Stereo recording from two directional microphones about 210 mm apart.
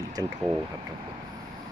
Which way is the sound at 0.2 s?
15° right (ahead or behind).